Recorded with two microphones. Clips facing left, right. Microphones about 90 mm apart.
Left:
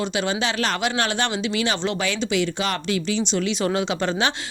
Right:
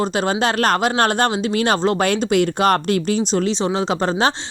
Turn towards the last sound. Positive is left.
turn(degrees=-35)  # may be behind; listen again after turning